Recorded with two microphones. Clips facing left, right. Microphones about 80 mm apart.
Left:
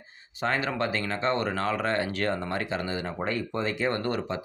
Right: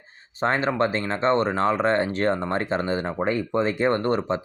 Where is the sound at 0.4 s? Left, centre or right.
Right.